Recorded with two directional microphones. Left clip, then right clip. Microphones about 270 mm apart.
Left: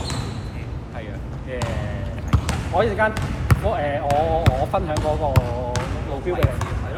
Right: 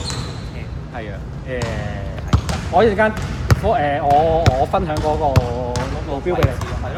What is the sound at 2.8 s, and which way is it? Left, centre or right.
Speech, right.